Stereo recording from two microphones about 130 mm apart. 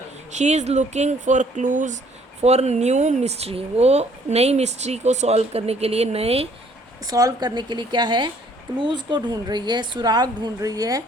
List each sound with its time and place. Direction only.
0.3 s speech: 60° right (ahead or behind)
2.4 s speech: 55° right (ahead or behind)
7.0 s speech: 30° right (ahead or behind)